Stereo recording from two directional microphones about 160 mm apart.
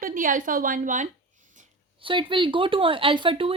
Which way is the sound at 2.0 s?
30° right (ahead or behind).